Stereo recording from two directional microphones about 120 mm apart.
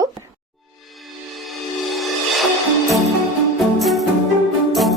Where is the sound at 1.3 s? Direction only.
Centre (ahead or behind).